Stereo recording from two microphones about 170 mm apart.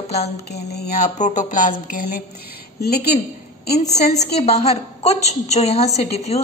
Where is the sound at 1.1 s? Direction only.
45° left (ahead or behind); by 3.1 s 65° left (ahead or behind).